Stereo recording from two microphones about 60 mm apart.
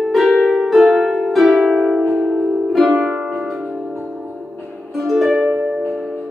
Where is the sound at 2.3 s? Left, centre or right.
Centre.